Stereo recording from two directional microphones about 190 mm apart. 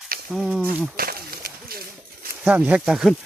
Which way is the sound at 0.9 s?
50° right (ahead or behind).